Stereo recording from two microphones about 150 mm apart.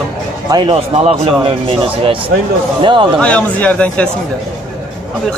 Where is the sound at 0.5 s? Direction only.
35° right (ahead or behind).